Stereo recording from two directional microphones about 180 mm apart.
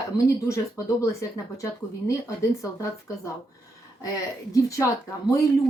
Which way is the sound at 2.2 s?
20° left (ahead or behind).